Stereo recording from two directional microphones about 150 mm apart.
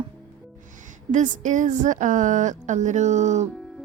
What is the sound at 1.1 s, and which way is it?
A woman's voice, 55° right (ahead or behind).